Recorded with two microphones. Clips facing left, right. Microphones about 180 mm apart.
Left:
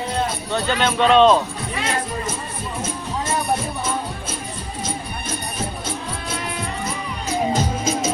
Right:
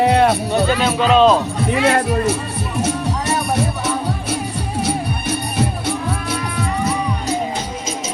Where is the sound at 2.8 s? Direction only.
75° right (ahead or behind).